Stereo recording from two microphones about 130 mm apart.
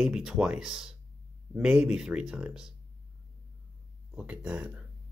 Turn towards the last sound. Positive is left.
turn(degrees=-10)  # may be behind; listen again after turning